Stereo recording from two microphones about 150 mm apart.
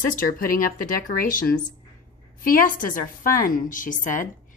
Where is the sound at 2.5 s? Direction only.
65° left (ahead or behind).